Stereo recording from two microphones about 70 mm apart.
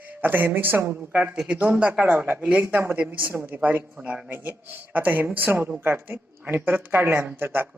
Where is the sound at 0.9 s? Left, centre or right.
Centre.